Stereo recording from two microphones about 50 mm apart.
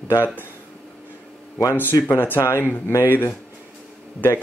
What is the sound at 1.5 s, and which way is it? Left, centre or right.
Speech, left.